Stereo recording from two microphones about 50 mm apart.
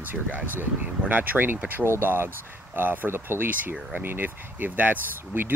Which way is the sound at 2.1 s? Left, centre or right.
Right.